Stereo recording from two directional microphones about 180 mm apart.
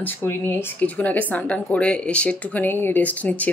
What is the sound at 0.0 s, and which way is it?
Speech, 10° left (ahead or behind).